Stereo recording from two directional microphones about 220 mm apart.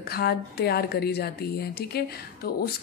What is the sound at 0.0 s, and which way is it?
Speech, 45° left (ahead or behind).